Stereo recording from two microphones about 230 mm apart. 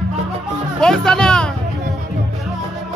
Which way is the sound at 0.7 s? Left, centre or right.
Centre.